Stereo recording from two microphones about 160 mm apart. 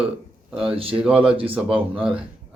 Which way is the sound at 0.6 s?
35° right (ahead or behind).